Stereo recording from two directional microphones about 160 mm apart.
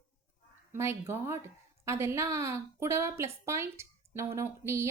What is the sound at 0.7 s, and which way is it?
A woman's voice, 15° right (ahead or behind).